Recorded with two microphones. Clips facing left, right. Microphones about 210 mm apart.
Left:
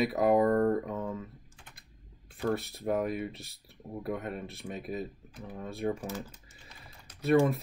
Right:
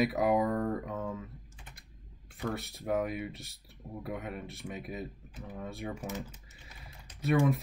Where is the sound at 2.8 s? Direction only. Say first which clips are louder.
Left 1 dB; centre (ahead or behind).